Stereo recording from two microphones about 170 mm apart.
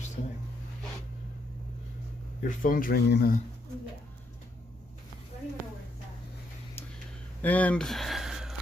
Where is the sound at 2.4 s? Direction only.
55° left (ahead or behind).